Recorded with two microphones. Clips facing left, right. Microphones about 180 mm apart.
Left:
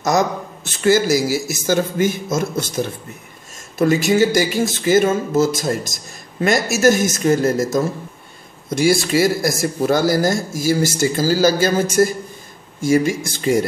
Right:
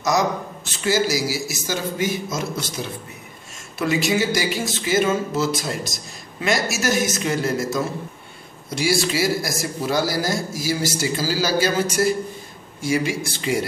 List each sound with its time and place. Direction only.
0.7 s speech: 50° left (ahead or behind)